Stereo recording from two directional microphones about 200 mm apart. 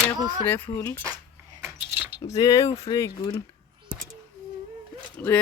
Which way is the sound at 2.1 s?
20° left (ahead or behind).